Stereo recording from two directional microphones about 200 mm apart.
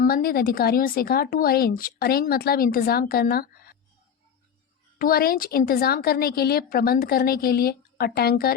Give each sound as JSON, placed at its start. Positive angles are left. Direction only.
{"t": 0.0, "sound": "speech", "side_deg": 50}
{"t": 4.9, "sound": "speech", "side_deg": 50}